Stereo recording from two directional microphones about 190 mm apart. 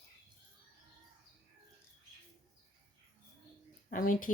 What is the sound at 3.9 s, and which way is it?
Speech, 45° left (ahead or behind).